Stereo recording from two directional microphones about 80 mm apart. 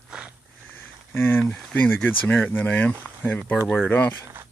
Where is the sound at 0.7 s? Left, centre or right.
Left.